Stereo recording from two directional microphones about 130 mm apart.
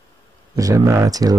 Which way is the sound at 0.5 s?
25° right (ahead or behind).